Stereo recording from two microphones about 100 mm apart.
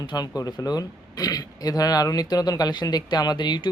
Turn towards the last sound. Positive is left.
turn(degrees=45)  # may be behind; listen again after turning